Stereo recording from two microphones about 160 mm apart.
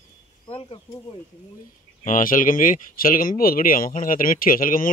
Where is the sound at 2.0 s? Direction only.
60° left (ahead or behind).